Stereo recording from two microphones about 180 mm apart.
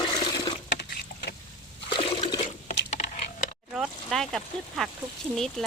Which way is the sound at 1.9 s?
30° left (ahead or behind).